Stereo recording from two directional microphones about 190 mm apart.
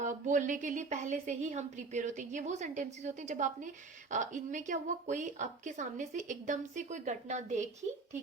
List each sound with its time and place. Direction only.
0.0 s a woman's voice: 40° right (ahead or behind)